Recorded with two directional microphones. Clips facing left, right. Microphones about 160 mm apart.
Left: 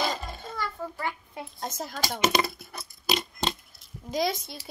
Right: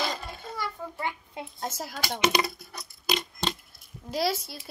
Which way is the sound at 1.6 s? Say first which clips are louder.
Even; 5° right (ahead or behind).